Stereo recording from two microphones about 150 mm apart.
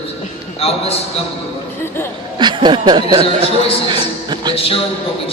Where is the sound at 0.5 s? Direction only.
40° left (ahead or behind).